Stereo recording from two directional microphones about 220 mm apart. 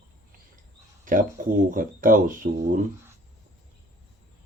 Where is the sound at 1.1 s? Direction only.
40° right (ahead or behind).